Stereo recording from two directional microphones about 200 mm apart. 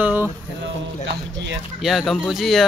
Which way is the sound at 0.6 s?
60° right (ahead or behind).